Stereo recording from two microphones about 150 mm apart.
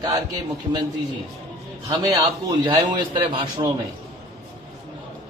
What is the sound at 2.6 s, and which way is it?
Speech, 30° right (ahead or behind).